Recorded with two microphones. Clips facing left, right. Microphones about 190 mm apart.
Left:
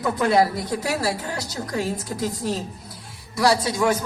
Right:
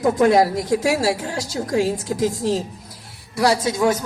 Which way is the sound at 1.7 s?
90° right.